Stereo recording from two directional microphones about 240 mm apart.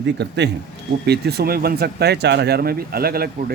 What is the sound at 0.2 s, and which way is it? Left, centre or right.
Speech, right.